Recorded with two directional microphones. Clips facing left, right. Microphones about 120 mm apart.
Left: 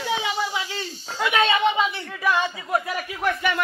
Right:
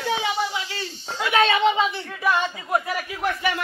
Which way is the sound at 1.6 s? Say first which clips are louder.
Right 1 dB; 25° right (ahead or behind).